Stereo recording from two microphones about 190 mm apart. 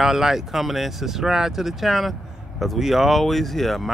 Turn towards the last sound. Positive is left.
turn(degrees=0)  # may be behind; listen again after turning